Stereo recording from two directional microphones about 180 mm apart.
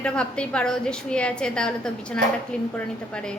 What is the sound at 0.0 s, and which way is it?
A woman's voice, 5° left (ahead or behind).